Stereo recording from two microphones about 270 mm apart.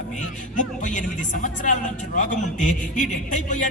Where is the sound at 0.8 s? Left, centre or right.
Left.